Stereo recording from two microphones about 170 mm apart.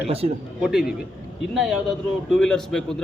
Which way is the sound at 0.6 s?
5° right (ahead or behind).